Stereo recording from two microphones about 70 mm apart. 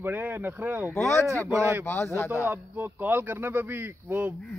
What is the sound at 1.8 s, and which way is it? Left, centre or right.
Speech, left.